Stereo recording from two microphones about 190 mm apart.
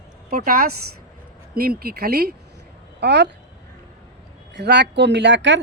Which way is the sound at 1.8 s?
55° right (ahead or behind).